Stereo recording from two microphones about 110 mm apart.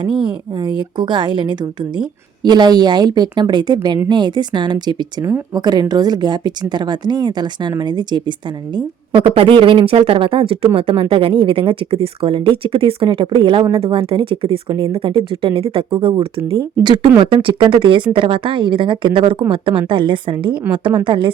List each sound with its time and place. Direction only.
0.0 s a woman's voice: 50° right (ahead or behind)
14.7 s a woman's voice: 45° right (ahead or behind)
16.8 s a woman's voice: 45° right (ahead or behind)